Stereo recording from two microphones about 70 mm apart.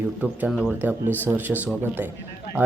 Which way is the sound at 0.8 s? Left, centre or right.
Right.